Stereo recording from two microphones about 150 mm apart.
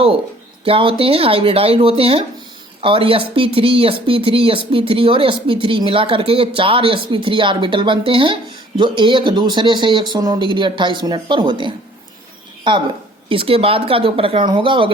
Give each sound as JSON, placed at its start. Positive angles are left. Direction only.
{"t": 0.6, "sound": "speech", "side_deg": -35}
{"t": 13.2, "sound": "speech", "side_deg": -35}